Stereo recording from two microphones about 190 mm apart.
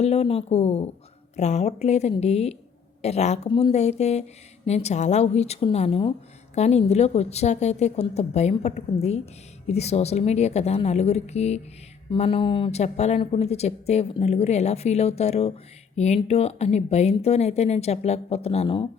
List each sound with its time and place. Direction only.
0.0 s speech: 35° left (ahead or behind)